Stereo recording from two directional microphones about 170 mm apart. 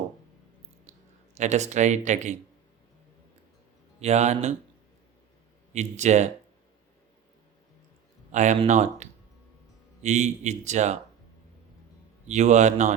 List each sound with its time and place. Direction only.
1.4 s a man's voice: 45° right (ahead or behind)
4.0 s a man's voice: 40° right (ahead or behind)
5.7 s a man's voice: 45° right (ahead or behind)
8.3 s a man's voice: 45° right (ahead or behind)
12.3 s a man's voice: 45° right (ahead or behind)